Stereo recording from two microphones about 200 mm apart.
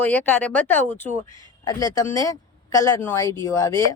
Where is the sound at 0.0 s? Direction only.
10° left (ahead or behind).